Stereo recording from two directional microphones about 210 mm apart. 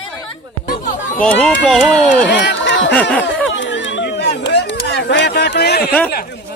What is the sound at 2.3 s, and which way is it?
Speech, 55° left (ahead or behind).